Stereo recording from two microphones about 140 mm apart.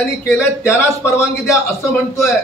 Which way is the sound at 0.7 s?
20° left (ahead or behind).